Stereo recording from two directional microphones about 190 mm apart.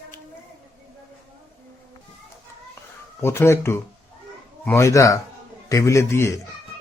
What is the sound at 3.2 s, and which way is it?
A man's voice, 15° left (ahead or behind).